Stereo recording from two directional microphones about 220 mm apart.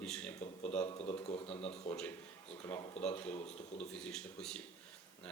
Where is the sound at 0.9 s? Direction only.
25° left (ahead or behind).